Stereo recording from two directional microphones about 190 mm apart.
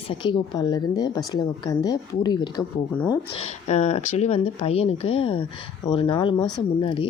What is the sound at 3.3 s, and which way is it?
Speech, 35° left (ahead or behind).